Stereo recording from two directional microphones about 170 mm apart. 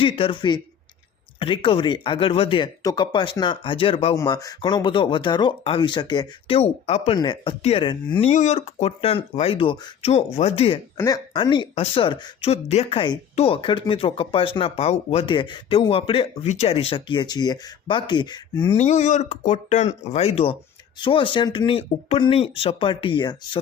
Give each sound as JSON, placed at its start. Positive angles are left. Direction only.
{"t": 0.0, "sound": "speech", "side_deg": 30}
{"t": 4.2, "sound": "speech", "side_deg": 20}
{"t": 6.6, "sound": "speech", "side_deg": 40}
{"t": 7.2, "sound": "speech", "side_deg": 25}
{"t": 8.3, "sound": "speech", "side_deg": 40}
{"t": 10.1, "sound": "speech", "side_deg": 40}
{"t": 10.9, "sound": "speech", "side_deg": 20}
{"t": 18.8, "sound": "speech", "side_deg": 45}